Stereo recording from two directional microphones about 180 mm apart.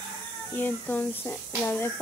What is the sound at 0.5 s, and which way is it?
Speech, 10° left (ahead or behind).